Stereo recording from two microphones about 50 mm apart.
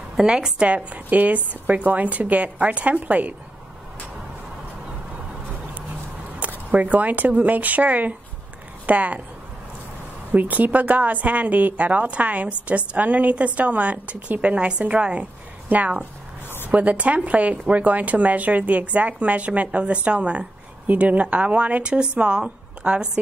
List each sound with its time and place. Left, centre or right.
0.2 s speech: centre
6.7 s speech: right
10.3 s speech: right